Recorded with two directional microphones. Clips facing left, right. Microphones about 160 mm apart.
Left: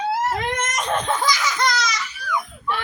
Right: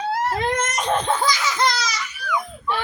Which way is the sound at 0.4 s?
30° right (ahead or behind).